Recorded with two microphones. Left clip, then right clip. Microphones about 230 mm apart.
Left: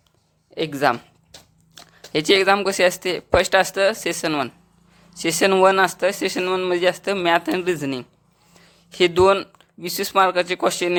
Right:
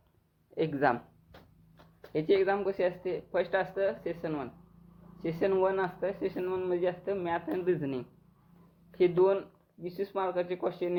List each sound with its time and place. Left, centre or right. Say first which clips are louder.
0.5 s speech: left 8 dB; left
2.1 s speech: left 11 dB; left